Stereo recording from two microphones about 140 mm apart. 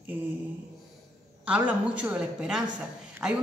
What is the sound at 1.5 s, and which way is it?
A woman's voice, 10° right (ahead or behind).